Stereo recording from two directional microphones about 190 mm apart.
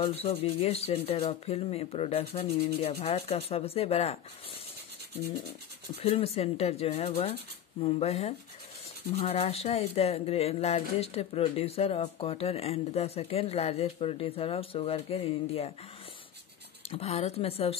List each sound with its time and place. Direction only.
0.0 s speech: 30° left (ahead or behind)
5.9 s speech: 30° left (ahead or behind)
16.9 s speech: 35° left (ahead or behind)